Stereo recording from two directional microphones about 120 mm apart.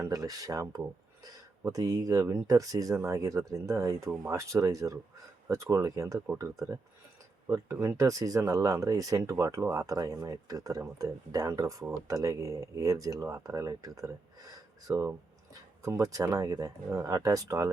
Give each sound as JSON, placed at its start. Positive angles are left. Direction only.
{"t": 0.0, "sound": "speech", "side_deg": -30}